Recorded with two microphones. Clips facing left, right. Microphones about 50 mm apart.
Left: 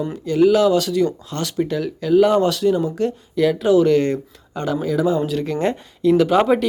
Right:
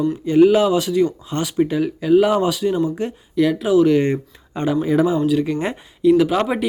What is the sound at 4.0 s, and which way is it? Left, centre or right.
Speech, right.